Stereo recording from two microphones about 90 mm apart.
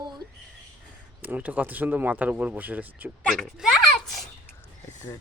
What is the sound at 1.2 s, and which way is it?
Speech, 20° right (ahead or behind).